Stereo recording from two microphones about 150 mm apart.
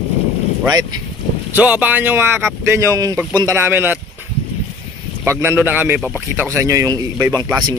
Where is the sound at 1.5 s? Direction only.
10° right (ahead or behind).